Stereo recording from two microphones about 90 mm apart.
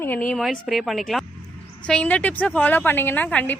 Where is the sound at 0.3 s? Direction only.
Centre (ahead or behind).